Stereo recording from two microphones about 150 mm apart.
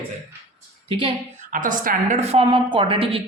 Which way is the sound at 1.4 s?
65° right (ahead or behind).